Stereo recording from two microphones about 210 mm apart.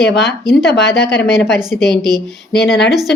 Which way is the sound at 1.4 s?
Centre (ahead or behind).